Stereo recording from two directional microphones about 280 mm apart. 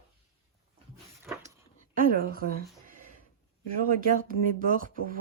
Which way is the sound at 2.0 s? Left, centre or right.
Right.